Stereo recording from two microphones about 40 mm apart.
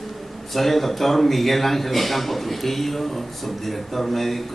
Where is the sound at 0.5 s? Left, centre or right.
Centre.